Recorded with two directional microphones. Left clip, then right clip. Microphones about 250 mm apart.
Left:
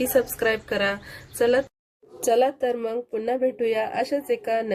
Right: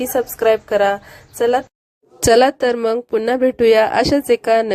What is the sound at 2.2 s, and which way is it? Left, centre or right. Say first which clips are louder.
Speech: right 8 dB; right.